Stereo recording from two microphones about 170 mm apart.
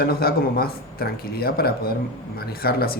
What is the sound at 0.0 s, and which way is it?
A man's voice, 65° left (ahead or behind).